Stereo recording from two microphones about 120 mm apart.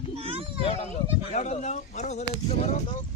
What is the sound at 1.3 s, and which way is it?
Speech, 70° left (ahead or behind).